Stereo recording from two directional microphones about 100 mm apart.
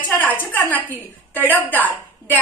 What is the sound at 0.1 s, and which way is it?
A woman's voice, 20° left (ahead or behind).